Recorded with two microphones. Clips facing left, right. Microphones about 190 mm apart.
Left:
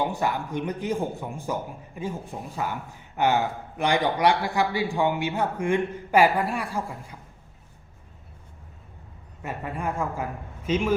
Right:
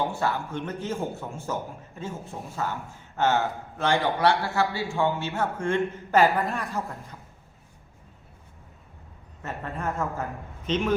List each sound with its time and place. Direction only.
0.0 s speech: 15° left (ahead or behind)
9.4 s speech: 10° left (ahead or behind)